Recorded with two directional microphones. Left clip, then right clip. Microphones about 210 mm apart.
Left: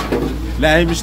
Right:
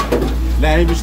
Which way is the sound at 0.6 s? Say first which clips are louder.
Left 3 dB; 35° left (ahead or behind).